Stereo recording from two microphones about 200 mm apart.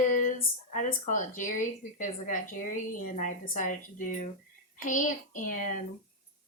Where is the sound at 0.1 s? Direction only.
40° left (ahead or behind).